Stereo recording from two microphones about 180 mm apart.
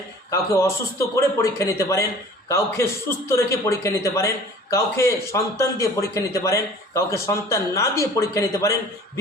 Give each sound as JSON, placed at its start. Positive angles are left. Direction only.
{"t": 0.3, "sound": "a man's voice", "side_deg": 15}